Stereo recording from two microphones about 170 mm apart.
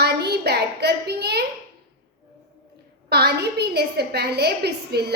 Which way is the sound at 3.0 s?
70° right (ahead or behind).